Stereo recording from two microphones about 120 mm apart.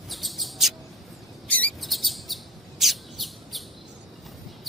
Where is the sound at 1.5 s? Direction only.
10° left (ahead or behind).